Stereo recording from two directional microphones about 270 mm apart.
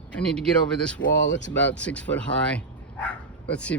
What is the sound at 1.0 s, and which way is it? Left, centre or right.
Speech, left.